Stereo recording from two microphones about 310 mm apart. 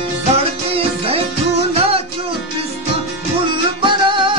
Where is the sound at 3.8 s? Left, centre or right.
Centre.